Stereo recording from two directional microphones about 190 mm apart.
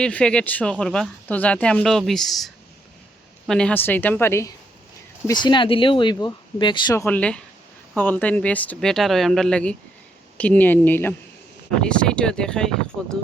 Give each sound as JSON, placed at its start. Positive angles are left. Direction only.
{"t": 0.0, "sound": "speech", "side_deg": 5}